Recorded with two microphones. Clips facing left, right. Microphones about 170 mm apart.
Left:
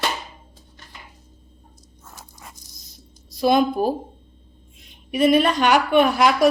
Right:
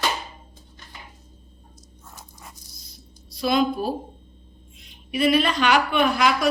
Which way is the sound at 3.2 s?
50° left (ahead or behind).